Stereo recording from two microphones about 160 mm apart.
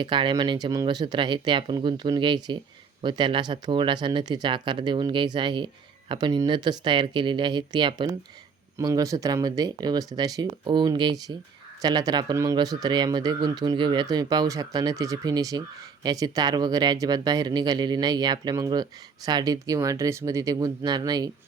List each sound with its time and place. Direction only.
0.0 s speech: 30° right (ahead or behind)